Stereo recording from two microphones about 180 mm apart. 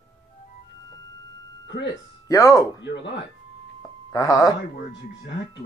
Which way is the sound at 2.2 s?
15° left (ahead or behind).